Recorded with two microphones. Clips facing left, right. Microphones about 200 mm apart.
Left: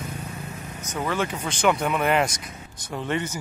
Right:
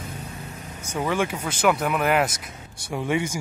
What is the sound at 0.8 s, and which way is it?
Speech, 10° right (ahead or behind).